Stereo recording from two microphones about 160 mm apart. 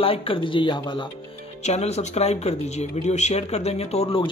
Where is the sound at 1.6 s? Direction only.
45° left (ahead or behind).